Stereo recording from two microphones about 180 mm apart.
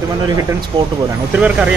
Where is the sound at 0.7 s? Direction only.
20° right (ahead or behind).